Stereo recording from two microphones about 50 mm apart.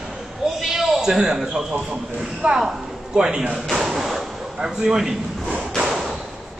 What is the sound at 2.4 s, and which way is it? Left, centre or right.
Speech, right.